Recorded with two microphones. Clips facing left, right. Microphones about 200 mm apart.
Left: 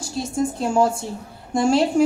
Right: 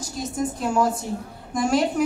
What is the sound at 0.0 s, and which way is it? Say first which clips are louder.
A woman's voice: left 3 dB; 25° left (ahead or behind).